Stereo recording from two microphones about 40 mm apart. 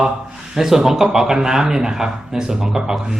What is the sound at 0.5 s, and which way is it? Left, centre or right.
A man's voice, centre.